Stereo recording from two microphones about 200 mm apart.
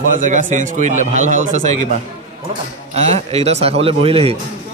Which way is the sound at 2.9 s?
35° right (ahead or behind).